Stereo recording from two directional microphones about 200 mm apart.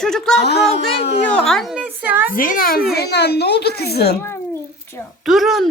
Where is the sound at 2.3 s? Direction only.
45° left (ahead or behind).